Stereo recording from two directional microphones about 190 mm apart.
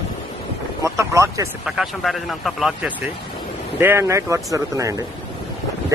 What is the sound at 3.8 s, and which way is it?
A man's voice, 15° right (ahead or behind).